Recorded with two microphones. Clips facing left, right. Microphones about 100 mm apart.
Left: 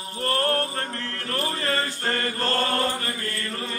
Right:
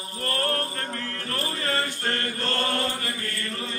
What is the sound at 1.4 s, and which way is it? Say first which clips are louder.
Chant: left 1 dB; 40° left (ahead or behind).